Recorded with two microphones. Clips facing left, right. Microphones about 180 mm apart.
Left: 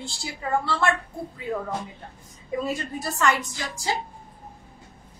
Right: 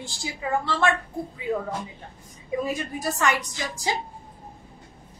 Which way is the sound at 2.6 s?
15° right (ahead or behind).